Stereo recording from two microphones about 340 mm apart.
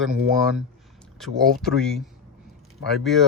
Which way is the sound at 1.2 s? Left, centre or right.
Centre.